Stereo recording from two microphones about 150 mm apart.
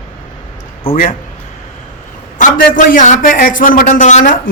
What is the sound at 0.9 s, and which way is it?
Speech, 65° left (ahead or behind).